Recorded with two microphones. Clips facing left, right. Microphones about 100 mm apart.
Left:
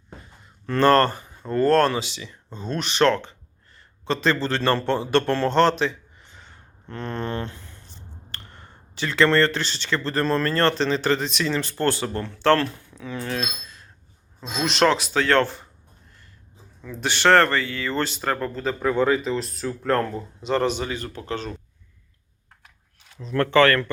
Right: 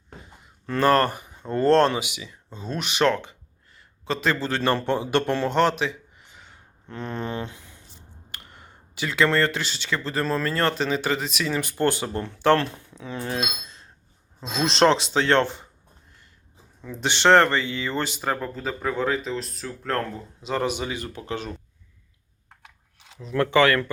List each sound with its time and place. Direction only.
0.7 s a man's voice: 5° right (ahead or behind)
16.8 s speech: 20° right (ahead or behind)
23.0 s speech: 15° right (ahead or behind)